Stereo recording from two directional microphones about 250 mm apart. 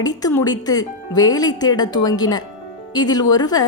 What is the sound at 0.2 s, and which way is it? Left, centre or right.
A woman's voice, centre.